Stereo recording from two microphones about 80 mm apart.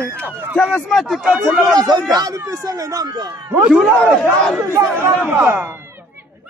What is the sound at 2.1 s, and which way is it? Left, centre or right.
Speech, right.